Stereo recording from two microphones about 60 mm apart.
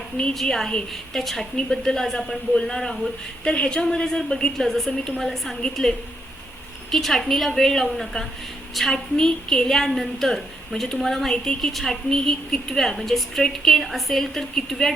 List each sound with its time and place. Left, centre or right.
0.3 s a woman's voice: centre
6.9 s a woman's voice: centre